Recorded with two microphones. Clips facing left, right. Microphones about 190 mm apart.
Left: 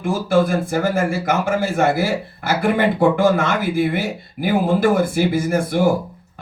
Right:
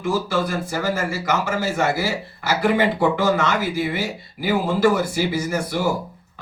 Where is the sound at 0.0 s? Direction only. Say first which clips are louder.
Left 5 dB; 50° left (ahead or behind).